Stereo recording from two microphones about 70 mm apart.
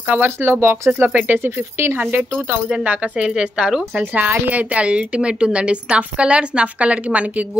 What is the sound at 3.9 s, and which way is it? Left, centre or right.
A woman's voice, right.